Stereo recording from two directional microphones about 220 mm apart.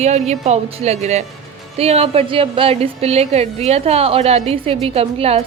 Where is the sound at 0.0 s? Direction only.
30° right (ahead or behind).